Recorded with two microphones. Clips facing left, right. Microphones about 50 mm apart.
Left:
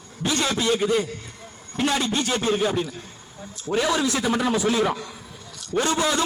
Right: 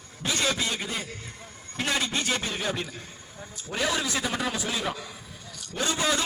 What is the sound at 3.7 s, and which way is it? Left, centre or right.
Speech, left.